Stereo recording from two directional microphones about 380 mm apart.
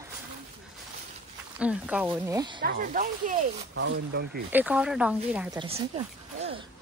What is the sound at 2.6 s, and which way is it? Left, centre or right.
Speech, right.